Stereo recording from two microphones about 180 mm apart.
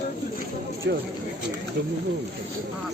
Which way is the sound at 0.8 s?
70° right (ahead or behind).